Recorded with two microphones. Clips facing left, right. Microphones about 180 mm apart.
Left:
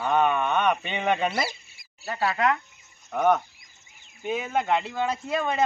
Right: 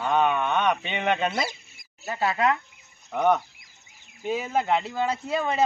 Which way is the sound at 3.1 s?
5° left (ahead or behind).